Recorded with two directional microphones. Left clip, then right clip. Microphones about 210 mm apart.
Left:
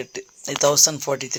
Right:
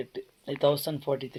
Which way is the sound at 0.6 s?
35° left (ahead or behind).